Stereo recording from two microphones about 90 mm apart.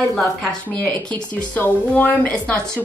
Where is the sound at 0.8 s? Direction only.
15° left (ahead or behind).